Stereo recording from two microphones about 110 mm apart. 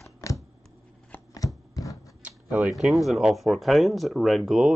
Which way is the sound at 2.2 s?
15° right (ahead or behind).